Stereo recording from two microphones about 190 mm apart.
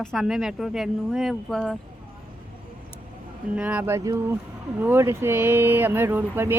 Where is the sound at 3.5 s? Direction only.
5° right (ahead or behind).